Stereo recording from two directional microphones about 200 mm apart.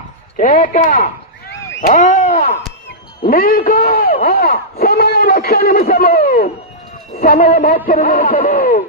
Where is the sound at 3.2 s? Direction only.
50° left (ahead or behind).